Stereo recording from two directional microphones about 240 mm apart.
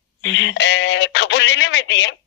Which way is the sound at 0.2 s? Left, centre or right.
Left.